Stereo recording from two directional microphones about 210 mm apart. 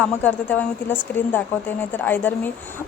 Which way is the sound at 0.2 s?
5° left (ahead or behind).